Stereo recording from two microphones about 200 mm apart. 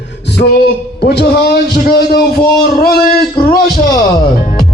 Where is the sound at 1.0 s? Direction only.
55° left (ahead or behind).